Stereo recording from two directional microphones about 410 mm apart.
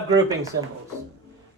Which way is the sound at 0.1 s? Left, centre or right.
Centre.